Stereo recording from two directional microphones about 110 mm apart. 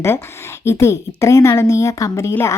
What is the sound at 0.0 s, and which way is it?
Speech, 25° left (ahead or behind).